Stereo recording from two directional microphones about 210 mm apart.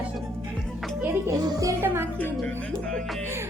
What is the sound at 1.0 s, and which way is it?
Speech, 15° right (ahead or behind).